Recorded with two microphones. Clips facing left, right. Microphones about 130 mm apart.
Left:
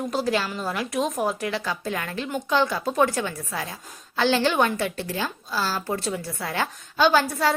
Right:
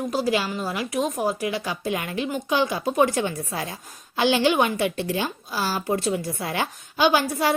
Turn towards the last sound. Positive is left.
turn(degrees=-15)  # may be behind; listen again after turning